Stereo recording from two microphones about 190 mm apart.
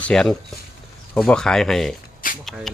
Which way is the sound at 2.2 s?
45° left (ahead or behind).